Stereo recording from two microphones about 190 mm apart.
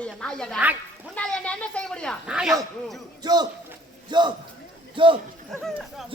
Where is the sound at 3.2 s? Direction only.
20° right (ahead or behind).